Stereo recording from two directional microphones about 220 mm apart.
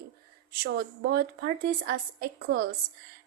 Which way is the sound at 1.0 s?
45° right (ahead or behind).